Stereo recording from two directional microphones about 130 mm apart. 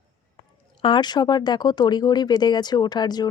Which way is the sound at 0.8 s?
40° left (ahead or behind).